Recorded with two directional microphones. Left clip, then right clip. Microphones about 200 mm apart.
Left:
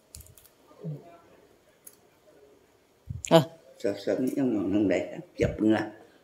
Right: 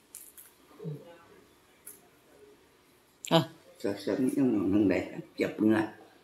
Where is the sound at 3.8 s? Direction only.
Centre (ahead or behind).